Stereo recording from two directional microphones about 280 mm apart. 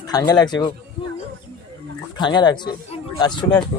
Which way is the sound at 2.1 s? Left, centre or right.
Centre.